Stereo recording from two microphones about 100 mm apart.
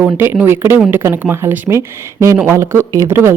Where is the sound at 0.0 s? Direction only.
20° right (ahead or behind).